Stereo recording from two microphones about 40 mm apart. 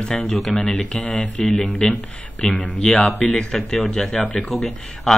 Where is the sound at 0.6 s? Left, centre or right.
Centre.